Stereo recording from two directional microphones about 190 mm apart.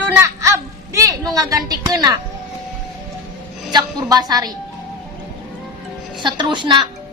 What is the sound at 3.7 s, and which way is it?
Speech, 20° right (ahead or behind).